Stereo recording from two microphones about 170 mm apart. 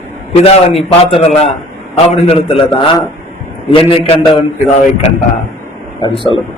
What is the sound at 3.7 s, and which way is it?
Speech, 35° left (ahead or behind).